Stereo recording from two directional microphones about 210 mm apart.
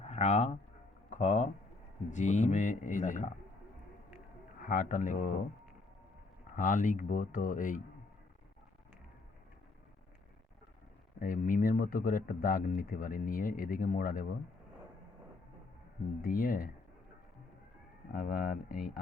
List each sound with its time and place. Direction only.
0.0 s speech: 30° left (ahead or behind)
4.6 s speech: 40° left (ahead or behind)
6.6 s speech: 40° left (ahead or behind)
11.2 s speech: 40° left (ahead or behind)
16.2 s speech: 40° left (ahead or behind)
18.1 s speech: 45° left (ahead or behind)